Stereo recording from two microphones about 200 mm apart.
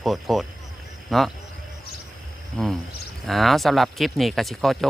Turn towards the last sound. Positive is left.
turn(degrees=0)  # may be behind; listen again after turning